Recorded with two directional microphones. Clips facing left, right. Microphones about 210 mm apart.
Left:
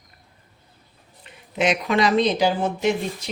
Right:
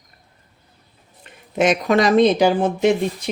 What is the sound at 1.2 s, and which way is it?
Speech, 50° right (ahead or behind).